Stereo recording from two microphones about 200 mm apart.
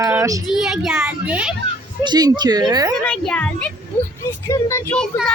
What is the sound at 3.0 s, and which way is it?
A child's voice, 5° left (ahead or behind).